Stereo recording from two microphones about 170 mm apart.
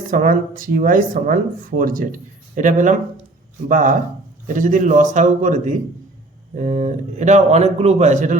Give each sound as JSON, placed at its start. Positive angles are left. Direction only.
{"t": 0.1, "sound": "a man's voice", "side_deg": -55}